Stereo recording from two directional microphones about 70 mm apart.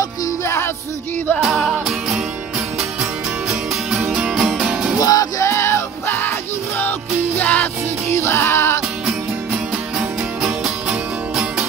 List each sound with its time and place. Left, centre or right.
1.4 s music: centre
5.0 s music: left
5.5 s music: left
8.1 s music: left
9.9 s music: centre